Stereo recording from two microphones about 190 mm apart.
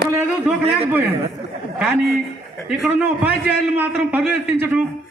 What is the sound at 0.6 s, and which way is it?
Speech, 30° right (ahead or behind).